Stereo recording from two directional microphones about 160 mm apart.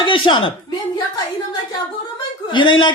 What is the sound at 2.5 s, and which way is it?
Speech, 30° left (ahead or behind).